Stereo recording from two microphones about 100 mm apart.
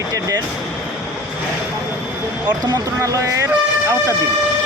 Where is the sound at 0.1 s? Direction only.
35° right (ahead or behind).